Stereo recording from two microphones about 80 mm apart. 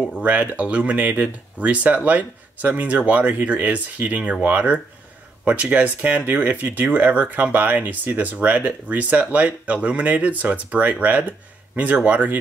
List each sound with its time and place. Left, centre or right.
0.1 s speech: centre